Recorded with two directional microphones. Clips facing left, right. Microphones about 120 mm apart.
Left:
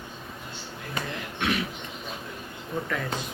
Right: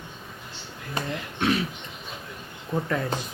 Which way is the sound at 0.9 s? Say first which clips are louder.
Right 3 dB; 35° right (ahead or behind).